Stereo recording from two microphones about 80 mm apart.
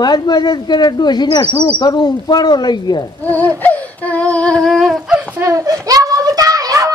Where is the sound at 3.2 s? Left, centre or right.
Left.